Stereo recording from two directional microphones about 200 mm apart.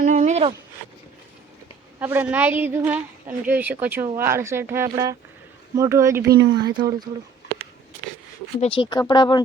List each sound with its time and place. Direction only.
0.0 s a sound: 35° right (ahead or behind)
2.0 s a woman's voice: 10° right (ahead or behind)
8.6 s speech: 25° left (ahead or behind)